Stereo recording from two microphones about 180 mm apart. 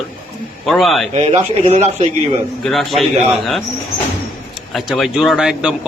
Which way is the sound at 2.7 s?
Centre (ahead or behind).